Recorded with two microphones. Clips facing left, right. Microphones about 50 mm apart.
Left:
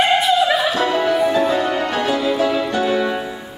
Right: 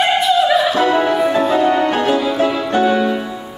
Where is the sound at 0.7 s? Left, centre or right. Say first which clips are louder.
Right 3 dB; right.